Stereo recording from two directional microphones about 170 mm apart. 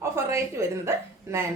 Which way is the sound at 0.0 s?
15° right (ahead or behind).